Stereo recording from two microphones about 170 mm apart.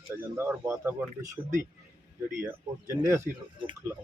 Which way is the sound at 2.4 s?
10° right (ahead or behind).